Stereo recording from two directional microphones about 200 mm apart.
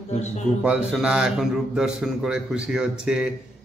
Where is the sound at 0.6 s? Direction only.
5° right (ahead or behind).